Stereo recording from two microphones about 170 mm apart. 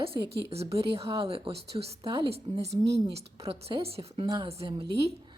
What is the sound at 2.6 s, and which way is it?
Speech, 80° right.